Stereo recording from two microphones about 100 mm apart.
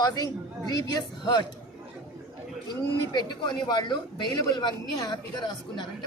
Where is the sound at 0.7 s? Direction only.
40° left (ahead or behind).